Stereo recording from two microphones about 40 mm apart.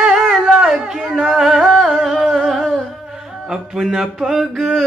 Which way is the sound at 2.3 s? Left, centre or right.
Centre.